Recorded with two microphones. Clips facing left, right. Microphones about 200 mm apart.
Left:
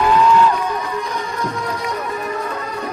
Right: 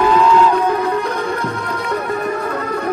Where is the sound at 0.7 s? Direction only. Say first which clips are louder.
Right 6 dB; 60° right (ahead or behind).